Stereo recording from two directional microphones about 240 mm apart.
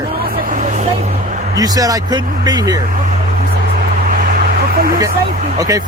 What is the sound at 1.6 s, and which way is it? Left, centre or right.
Speech, centre.